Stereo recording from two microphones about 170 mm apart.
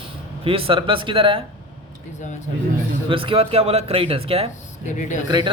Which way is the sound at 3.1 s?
30° right (ahead or behind).